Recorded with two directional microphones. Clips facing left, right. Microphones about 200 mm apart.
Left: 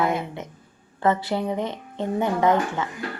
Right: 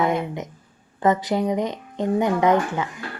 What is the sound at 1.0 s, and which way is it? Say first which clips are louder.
Speech: right 2 dB; 15° right (ahead or behind).